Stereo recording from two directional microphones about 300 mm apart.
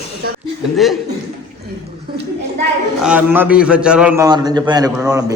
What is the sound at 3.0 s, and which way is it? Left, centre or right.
A man's voice, centre.